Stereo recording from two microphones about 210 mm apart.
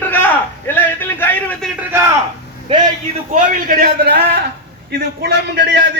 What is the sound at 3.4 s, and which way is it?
Speech, 40° right (ahead or behind).